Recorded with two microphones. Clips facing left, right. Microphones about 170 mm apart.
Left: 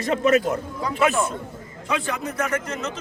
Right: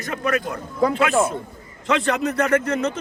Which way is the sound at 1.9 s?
80° right.